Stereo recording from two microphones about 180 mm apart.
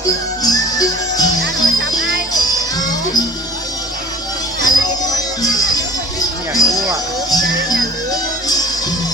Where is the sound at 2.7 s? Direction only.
20° left (ahead or behind).